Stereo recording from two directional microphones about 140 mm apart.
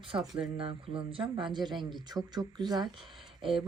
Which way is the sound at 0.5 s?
40° right (ahead or behind).